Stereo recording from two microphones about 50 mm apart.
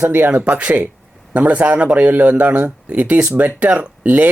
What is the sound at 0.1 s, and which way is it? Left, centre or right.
Speech, right.